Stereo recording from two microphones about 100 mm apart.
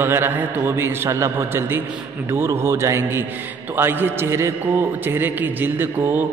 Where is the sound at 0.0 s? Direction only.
20° right (ahead or behind).